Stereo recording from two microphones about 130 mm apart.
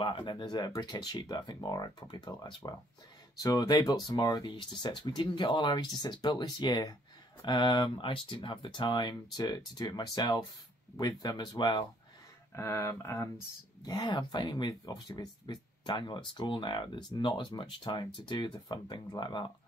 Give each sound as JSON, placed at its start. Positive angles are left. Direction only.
{"t": 0.0, "sound": "speech", "side_deg": 40}
{"t": 12.5, "sound": "speech", "side_deg": 20}
{"t": 13.8, "sound": "speech", "side_deg": 30}